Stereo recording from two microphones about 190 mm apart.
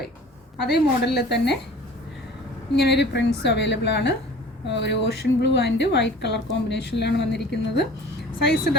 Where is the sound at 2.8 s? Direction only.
60° left (ahead or behind).